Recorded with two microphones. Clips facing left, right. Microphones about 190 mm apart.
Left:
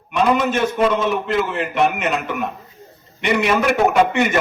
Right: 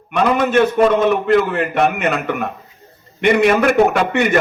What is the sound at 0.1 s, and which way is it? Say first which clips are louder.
A man's voice: right 2 dB; 55° right (ahead or behind).